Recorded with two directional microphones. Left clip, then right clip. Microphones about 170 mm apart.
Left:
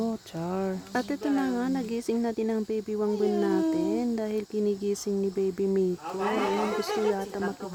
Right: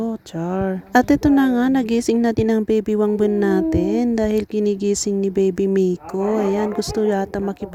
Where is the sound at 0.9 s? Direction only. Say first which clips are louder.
Right 16 dB; 50° right (ahead or behind).